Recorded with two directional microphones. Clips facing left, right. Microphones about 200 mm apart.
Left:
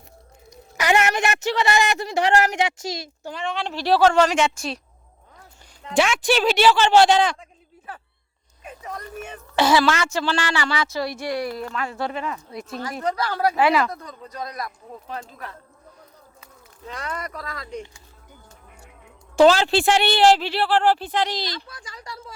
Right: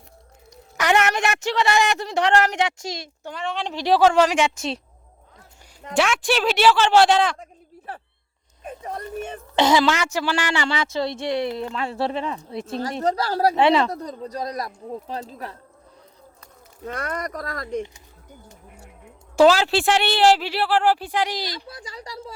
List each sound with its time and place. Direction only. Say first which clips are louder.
0.8 s speech: even; 5° left (ahead or behind)
3.6 s a woman's voice: even; 15° right (ahead or behind)
5.9 s speech: left 1 dB; centre (ahead or behind)
8.6 s speech: right 3 dB; 30° right (ahead or behind)
16.8 s speech: right 4 dB; 50° right (ahead or behind)
19.4 s a woman's voice: even; 5° right (ahead or behind)
21.7 s speech: right 3 dB; 35° right (ahead or behind)